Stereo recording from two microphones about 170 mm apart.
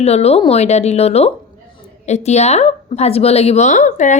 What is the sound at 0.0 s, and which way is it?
A woman's voice, 40° left (ahead or behind).